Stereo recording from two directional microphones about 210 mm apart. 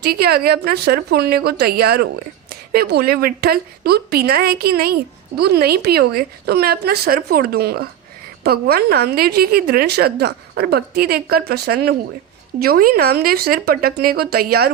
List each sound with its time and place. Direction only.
0.0 s a woman's voice: 50° right (ahead or behind)